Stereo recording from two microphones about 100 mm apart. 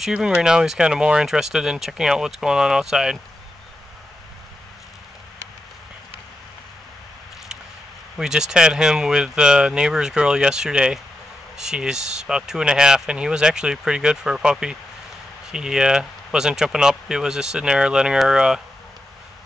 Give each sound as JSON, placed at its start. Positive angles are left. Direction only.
{"t": 0.0, "sound": "speech", "side_deg": -10}
{"t": 8.2, "sound": "speech", "side_deg": -5}